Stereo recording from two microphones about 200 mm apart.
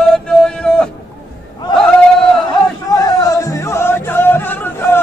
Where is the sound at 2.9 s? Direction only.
20° left (ahead or behind).